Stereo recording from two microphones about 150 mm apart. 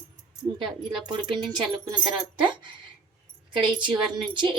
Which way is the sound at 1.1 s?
30° right (ahead or behind).